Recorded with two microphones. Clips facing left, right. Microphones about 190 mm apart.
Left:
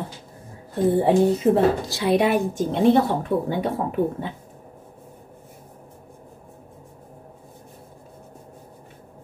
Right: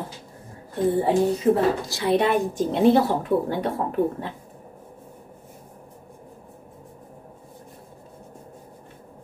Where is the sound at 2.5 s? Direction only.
Centre (ahead or behind).